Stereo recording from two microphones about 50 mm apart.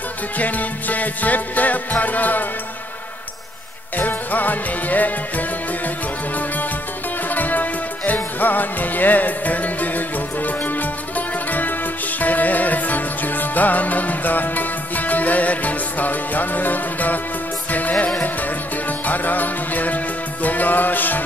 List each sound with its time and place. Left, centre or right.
0.4 s music: left
4.0 s music: left
7.2 s music: left